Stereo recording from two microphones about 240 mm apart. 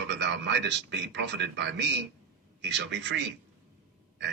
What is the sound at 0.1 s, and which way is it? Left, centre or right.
A man's voice, right.